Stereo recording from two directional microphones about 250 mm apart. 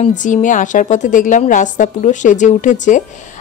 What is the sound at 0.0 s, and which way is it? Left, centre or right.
A woman's voice, left.